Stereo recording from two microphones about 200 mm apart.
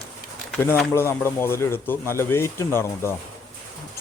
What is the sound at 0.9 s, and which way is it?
Speech, 10° left (ahead or behind).